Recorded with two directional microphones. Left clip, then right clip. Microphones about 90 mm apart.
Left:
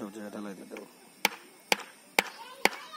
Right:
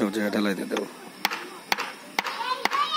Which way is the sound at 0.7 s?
5° right (ahead or behind).